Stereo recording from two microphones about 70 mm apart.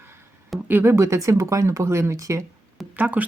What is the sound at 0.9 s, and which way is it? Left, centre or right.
Speech, right.